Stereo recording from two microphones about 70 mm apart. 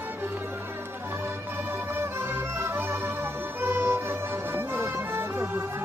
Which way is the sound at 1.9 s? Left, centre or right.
Right.